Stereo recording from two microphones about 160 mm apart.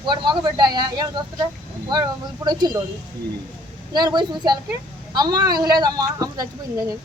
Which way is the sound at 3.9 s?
25° right (ahead or behind).